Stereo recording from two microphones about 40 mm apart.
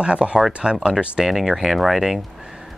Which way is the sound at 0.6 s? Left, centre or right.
Centre.